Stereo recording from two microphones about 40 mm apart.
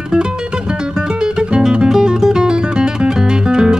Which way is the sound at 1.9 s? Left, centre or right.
Centre.